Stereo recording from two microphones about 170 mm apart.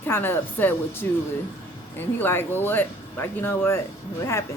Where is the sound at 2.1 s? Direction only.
10° left (ahead or behind).